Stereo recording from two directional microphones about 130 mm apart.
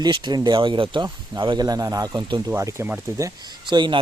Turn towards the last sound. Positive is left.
turn(degrees=-35)  # may be behind; listen again after turning